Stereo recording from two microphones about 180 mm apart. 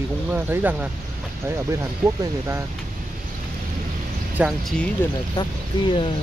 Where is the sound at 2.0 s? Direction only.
15° right (ahead or behind).